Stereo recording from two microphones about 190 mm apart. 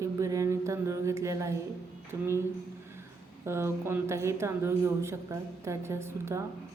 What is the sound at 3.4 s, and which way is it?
Speech, 15° right (ahead or behind).